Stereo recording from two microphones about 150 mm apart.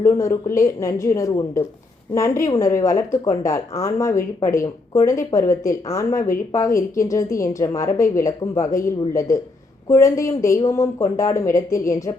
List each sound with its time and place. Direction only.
0.0 s a woman's voice: 20° left (ahead or behind)